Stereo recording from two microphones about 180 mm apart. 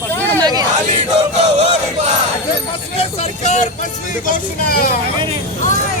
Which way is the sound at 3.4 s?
40° left (ahead or behind).